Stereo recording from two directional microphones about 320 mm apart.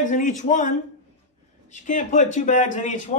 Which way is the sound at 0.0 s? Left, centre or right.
Left.